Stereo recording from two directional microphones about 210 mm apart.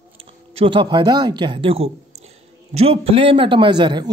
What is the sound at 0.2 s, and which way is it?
A man's voice, 25° right (ahead or behind).